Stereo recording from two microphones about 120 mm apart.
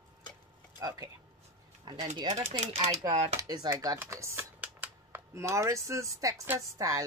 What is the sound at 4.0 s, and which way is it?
Speech, 25° right (ahead or behind).